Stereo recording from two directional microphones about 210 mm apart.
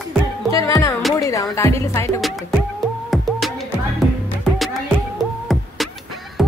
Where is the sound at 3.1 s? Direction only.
Centre (ahead or behind).